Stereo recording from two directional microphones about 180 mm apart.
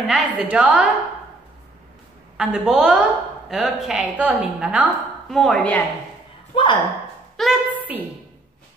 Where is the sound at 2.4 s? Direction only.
5° right (ahead or behind).